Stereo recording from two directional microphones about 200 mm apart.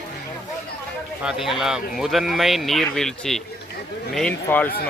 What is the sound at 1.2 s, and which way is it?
Speech, 5° right (ahead or behind).